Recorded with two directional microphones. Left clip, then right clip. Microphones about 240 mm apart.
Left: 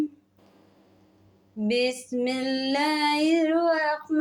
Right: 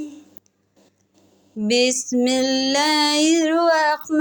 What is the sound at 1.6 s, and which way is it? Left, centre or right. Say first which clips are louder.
Female singing: right 7 dB; right.